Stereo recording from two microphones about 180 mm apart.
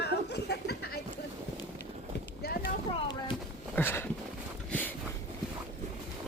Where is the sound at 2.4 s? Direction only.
60° left (ahead or behind).